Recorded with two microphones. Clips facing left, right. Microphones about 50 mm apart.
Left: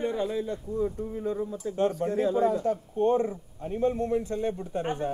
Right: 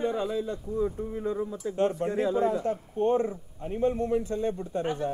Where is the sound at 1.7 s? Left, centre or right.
Right.